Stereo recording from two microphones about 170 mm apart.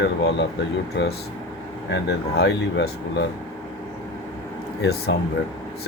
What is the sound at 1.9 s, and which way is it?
Speech, 75° left (ahead or behind).